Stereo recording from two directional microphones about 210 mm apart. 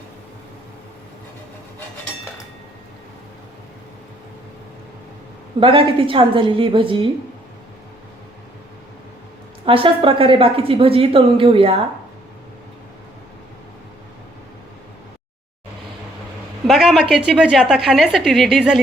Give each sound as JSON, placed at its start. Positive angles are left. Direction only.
{"t": 5.5, "sound": "a woman's voice", "side_deg": -25}
{"t": 9.6, "sound": "a woman's voice", "side_deg": -25}
{"t": 16.6, "sound": "a woman's voice", "side_deg": 0}